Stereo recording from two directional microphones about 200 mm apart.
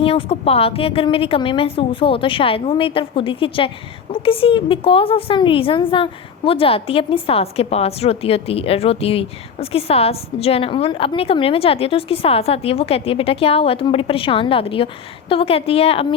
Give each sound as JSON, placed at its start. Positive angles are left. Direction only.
{"t": 0.0, "sound": "a woman's voice", "side_deg": 30}